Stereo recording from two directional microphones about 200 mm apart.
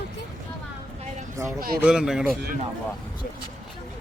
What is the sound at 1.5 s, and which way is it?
Speech, 45° right (ahead or behind).